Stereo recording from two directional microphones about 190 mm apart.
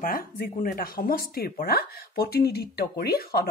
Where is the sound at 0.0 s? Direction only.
50° left (ahead or behind).